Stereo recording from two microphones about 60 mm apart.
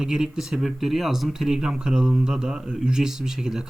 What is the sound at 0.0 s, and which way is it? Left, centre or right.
Speech, centre.